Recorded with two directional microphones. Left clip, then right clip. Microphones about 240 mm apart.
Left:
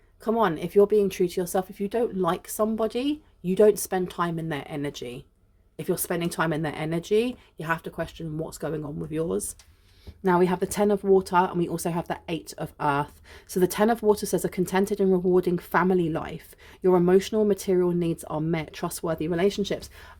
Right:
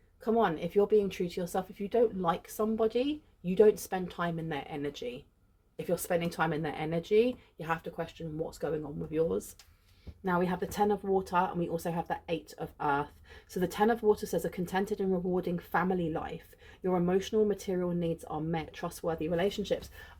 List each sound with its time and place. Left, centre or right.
0.3 s speech: left